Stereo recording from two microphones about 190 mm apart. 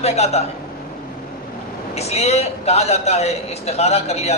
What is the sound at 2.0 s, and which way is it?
A man's voice, 35° left (ahead or behind).